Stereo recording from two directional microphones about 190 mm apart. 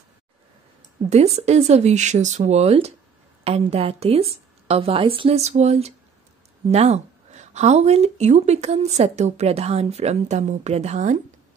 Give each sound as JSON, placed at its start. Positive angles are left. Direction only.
{"t": 1.1, "sound": "speech", "side_deg": -35}